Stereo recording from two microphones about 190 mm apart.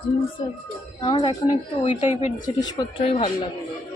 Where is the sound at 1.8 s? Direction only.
35° left (ahead or behind).